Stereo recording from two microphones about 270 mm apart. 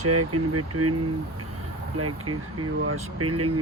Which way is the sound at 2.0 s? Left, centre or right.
Right.